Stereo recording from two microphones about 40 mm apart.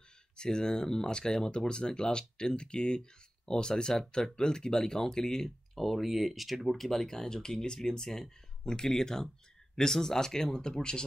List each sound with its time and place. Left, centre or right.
0.4 s speech: centre
5.8 s speech: centre; by 11.1 s left